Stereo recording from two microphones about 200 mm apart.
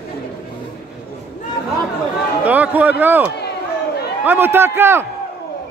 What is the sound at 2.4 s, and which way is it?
A man's voice, 10° right (ahead or behind).